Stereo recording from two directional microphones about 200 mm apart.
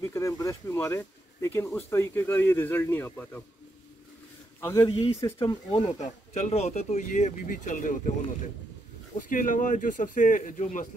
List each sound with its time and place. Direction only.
0.1 s speech: 15° left (ahead or behind)
4.6 s speech: 15° left (ahead or behind)
5.8 s speech: 35° left (ahead or behind)